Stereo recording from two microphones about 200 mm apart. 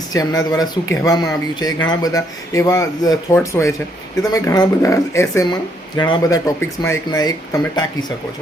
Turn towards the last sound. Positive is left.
turn(degrees=20)  # may be behind; listen again after turning